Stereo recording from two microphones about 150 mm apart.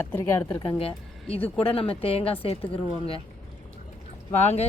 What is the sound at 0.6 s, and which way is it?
A woman's voice, 35° left (ahead or behind).